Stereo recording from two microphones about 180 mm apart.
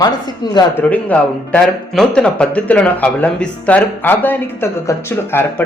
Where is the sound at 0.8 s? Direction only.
10° left (ahead or behind).